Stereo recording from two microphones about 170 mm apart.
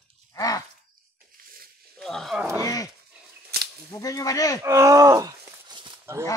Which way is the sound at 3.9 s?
20° left (ahead or behind).